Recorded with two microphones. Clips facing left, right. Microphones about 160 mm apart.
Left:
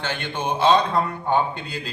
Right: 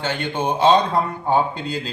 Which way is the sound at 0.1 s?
15° right (ahead or behind).